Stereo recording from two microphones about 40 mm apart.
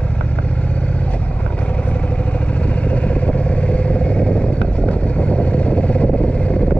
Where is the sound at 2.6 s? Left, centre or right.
Left.